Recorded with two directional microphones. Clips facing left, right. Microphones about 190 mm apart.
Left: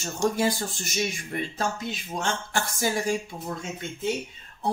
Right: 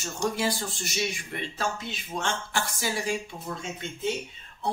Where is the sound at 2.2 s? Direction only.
45° left (ahead or behind).